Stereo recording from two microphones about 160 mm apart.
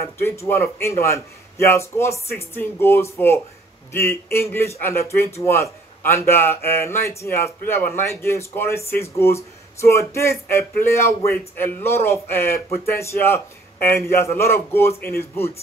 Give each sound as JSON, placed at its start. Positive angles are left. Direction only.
{"t": 0.2, "sound": "a man's voice", "side_deg": 15}